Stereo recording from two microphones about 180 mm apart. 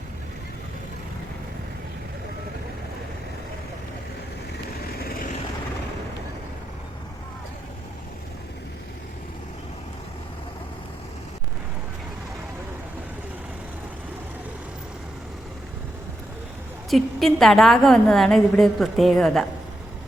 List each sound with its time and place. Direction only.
4.9 s vehicle: 55° left (ahead or behind)
16.9 s a woman's voice: centre (ahead or behind)